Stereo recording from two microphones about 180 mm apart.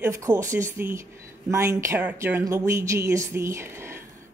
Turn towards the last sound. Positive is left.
turn(degrees=-15)  # may be behind; listen again after turning